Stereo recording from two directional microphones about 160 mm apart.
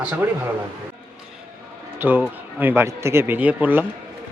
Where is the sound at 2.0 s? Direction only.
10° right (ahead or behind).